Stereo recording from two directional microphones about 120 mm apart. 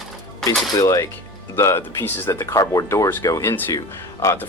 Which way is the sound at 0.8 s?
30° left (ahead or behind).